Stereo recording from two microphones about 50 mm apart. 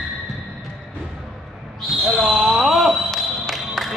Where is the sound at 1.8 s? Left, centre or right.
Centre.